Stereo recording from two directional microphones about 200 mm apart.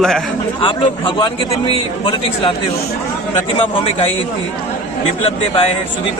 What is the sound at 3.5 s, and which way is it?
Speech, 25° left (ahead or behind).